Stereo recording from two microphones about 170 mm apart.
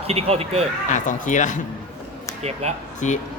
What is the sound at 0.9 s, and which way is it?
Speech, 45° left (ahead or behind).